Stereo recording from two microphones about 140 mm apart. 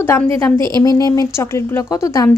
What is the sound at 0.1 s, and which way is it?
A woman's voice, 20° left (ahead or behind).